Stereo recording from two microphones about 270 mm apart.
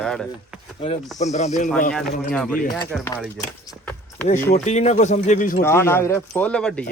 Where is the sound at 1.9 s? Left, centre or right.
Centre.